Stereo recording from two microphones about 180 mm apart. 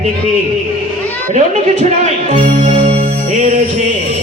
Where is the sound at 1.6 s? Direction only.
40° right (ahead or behind).